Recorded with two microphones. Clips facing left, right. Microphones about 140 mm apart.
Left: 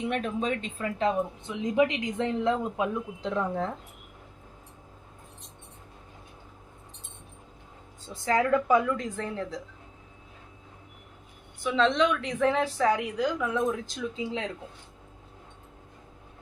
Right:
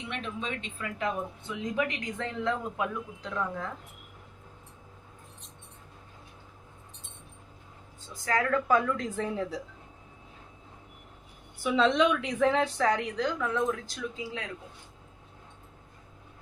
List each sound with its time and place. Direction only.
0.1 s speech: 45° left (ahead or behind)
8.0 s speech: 25° left (ahead or behind)
8.6 s a woman's voice: 5° left (ahead or behind)
9.1 s speech: 5° right (ahead or behind)
11.6 s a woman's voice: 5° right (ahead or behind); by 14.5 s 25° left (ahead or behind)